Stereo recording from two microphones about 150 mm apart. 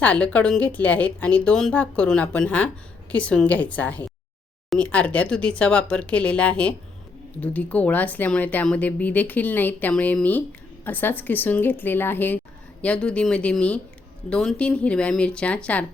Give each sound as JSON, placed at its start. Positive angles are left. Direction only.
{"t": 0.0, "sound": "speech", "side_deg": 10}